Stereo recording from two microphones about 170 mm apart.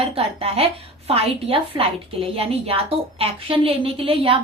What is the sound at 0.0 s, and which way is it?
A woman's voice, 35° right (ahead or behind).